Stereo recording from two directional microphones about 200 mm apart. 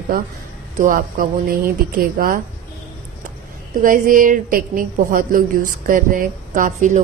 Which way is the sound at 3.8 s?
40° right (ahead or behind).